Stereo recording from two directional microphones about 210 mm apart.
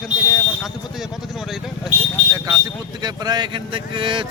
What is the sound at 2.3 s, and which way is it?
Speech, 15° right (ahead or behind).